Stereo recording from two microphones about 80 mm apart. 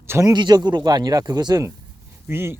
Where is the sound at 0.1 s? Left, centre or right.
Right.